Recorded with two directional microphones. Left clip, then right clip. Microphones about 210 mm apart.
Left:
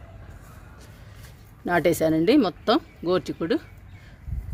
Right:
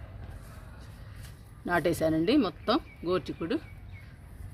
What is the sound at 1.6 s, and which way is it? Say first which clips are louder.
Speech: left 6 dB; 35° left (ahead or behind).